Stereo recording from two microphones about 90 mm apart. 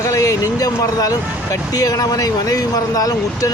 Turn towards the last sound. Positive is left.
turn(degrees=40)  # may be behind; listen again after turning